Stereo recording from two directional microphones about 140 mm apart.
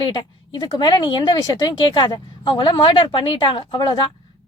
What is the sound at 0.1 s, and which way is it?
A woman's voice, 35° left (ahead or behind).